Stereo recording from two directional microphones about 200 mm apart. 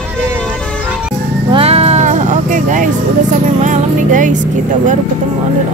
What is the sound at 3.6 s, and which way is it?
Speech, 40° right (ahead or behind).